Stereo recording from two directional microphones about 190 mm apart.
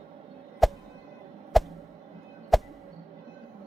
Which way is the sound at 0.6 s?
Centre (ahead or behind).